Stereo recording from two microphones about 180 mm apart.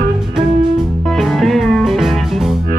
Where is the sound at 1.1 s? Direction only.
Centre (ahead or behind).